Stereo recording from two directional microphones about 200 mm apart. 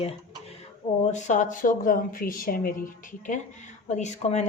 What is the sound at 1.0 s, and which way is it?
A woman's voice, 35° left (ahead or behind).